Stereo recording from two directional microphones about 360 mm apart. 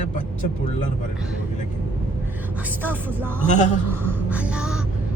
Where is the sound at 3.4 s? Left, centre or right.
Centre.